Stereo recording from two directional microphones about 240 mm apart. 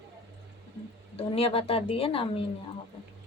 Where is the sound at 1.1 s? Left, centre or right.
Left.